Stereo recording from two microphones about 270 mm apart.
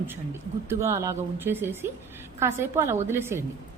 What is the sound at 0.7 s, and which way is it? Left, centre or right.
A woman's voice, centre.